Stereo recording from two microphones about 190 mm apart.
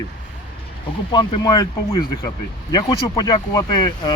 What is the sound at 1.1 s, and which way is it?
Speech, 20° left (ahead or behind).